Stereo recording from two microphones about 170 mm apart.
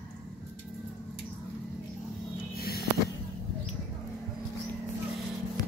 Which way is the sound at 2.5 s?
65° left (ahead or behind).